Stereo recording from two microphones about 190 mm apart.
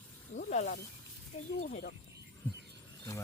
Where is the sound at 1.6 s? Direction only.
40° left (ahead or behind).